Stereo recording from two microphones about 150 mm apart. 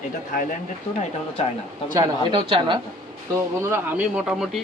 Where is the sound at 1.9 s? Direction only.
25° right (ahead or behind).